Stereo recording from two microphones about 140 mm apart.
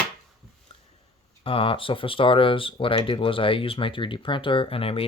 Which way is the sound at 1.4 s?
40° left (ahead or behind).